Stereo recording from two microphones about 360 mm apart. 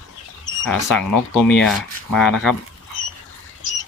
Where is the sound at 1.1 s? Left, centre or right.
Left.